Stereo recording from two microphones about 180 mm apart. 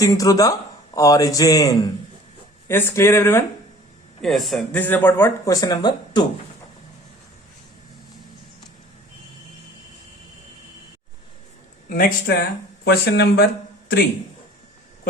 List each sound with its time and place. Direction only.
0.0 s a man's voice: 20° left (ahead or behind)
4.2 s speech: centre (ahead or behind); by 6.2 s 20° left (ahead or behind)
11.9 s speech: 55° left (ahead or behind)